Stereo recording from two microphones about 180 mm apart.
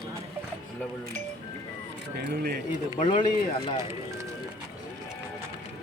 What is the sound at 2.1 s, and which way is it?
Speech, 60° right (ahead or behind).